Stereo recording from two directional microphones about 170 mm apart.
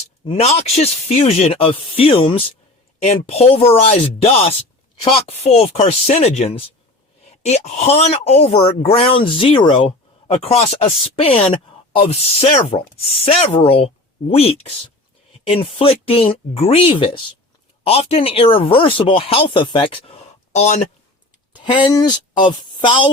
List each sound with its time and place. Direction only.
0.3 s speech: 35° left (ahead or behind)
20.6 s speech: 40° left (ahead or behind)
21.5 s a sound: 30° left (ahead or behind)
21.8 s speech: 25° left (ahead or behind)